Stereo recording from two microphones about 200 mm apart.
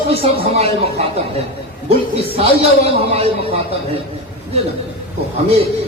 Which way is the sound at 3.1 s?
30° right (ahead or behind).